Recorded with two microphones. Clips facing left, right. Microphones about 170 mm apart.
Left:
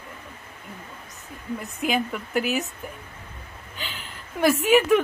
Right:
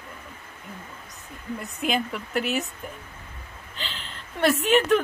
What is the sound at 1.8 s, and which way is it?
Speech, 5° left (ahead or behind).